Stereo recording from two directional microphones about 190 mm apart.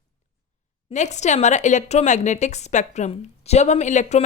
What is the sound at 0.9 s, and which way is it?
A woman's voice, 35° left (ahead or behind).